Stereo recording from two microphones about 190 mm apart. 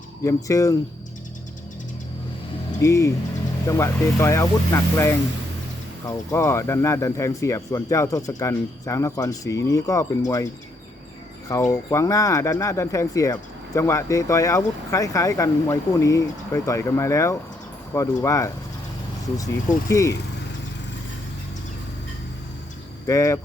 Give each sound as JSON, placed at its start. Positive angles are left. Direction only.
{"t": 0.3, "sound": "speech", "side_deg": 15}
{"t": 2.8, "sound": "speech", "side_deg": 15}
{"t": 19.9, "sound": "speech", "side_deg": 15}
{"t": 23.0, "sound": "speech", "side_deg": 15}